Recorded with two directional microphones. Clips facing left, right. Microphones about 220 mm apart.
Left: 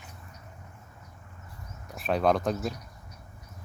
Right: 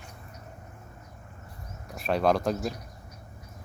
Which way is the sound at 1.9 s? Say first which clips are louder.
Even; centre (ahead or behind).